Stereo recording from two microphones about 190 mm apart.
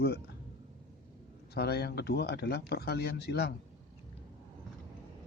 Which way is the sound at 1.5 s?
55° left (ahead or behind).